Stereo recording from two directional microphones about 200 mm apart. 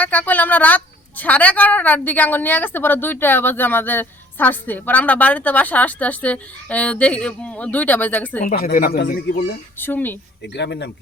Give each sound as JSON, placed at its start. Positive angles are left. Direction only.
{"t": 0.0, "sound": "a woman's voice", "side_deg": 10}
{"t": 8.4, "sound": "a man's voice", "side_deg": 45}
{"t": 9.7, "sound": "a woman's voice", "side_deg": 10}
{"t": 10.4, "sound": "speech", "side_deg": 60}